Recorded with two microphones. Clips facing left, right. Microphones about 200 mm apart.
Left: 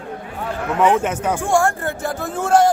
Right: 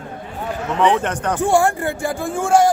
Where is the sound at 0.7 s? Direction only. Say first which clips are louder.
Left 1 dB; 5° left (ahead or behind).